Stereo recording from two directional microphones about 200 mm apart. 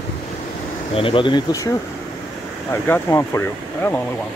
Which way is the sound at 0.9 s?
25° left (ahead or behind).